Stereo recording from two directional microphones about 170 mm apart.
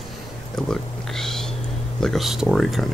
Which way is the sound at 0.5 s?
Centre (ahead or behind).